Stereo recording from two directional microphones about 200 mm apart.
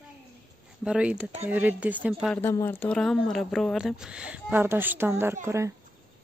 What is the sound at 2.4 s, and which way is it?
Speech, 10° left (ahead or behind).